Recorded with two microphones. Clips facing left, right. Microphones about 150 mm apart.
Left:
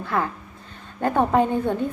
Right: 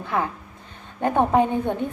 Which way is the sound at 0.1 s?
15° right (ahead or behind).